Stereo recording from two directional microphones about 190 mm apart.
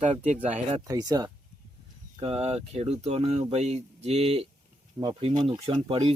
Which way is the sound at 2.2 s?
30° right (ahead or behind).